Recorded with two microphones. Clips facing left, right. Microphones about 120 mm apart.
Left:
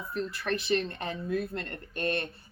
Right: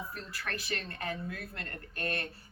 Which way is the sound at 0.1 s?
20° left (ahead or behind).